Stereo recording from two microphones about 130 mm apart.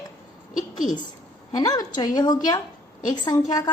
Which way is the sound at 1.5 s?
30° left (ahead or behind).